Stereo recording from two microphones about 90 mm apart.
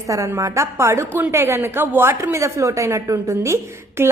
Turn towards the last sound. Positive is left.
turn(degrees=-30)  # may be behind; listen again after turning